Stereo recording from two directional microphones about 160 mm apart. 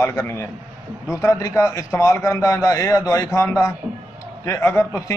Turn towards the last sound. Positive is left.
turn(degrees=15)  # may be behind; listen again after turning